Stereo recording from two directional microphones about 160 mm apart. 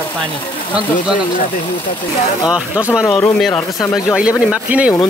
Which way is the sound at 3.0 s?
20° left (ahead or behind).